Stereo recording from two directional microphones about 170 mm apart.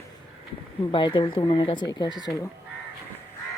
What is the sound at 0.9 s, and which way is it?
Speech, 30° left (ahead or behind).